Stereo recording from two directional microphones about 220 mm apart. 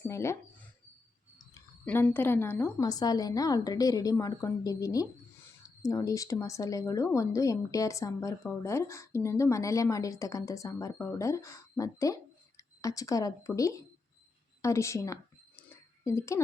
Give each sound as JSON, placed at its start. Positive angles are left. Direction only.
{"t": 0.1, "sound": "speech", "side_deg": 10}
{"t": 1.5, "sound": "speech", "side_deg": 10}
{"t": 14.6, "sound": "a sound", "side_deg": 15}
{"t": 16.0, "sound": "speech", "side_deg": 15}